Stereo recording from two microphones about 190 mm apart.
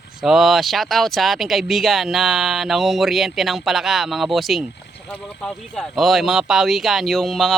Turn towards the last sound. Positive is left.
turn(degrees=0)  # may be behind; listen again after turning